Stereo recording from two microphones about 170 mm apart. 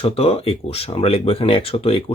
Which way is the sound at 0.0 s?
35° left (ahead or behind).